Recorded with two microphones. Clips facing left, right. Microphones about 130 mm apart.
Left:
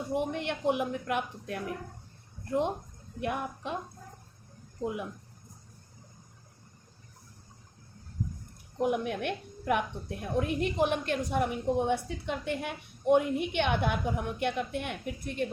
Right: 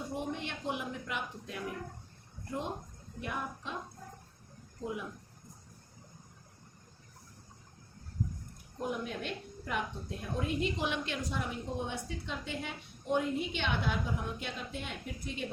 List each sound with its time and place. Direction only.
0.1 s a woman's voice: 60° left (ahead or behind)
3.2 s a woman's voice: 60° left (ahead or behind)
8.8 s a woman's voice: 60° left (ahead or behind)